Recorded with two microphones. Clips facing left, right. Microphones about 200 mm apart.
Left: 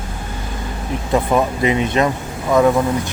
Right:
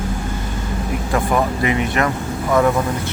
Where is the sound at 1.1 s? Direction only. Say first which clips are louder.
Left 2 dB; 20° left (ahead or behind).